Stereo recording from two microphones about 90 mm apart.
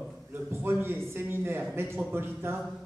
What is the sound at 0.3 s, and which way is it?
A man's voice, 25° right (ahead or behind).